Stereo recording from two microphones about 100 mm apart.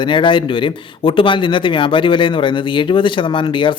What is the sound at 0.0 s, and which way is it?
A man's voice, 55° left (ahead or behind).